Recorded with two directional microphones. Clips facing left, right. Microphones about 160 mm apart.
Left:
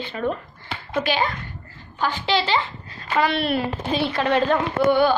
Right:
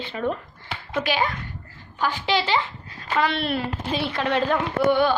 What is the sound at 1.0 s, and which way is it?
A woman's voice, 5° right (ahead or behind).